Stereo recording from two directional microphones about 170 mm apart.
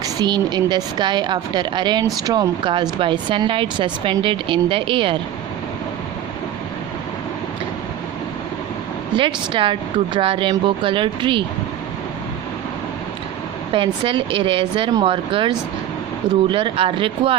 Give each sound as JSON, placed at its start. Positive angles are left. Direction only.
{"t": 0.0, "sound": "speech", "side_deg": -25}
{"t": 9.1, "sound": "speech", "side_deg": -30}
{"t": 13.7, "sound": "speech", "side_deg": -30}